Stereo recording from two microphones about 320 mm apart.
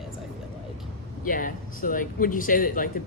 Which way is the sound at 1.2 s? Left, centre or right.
Left.